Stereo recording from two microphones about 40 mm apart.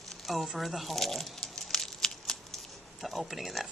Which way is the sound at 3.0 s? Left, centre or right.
Centre.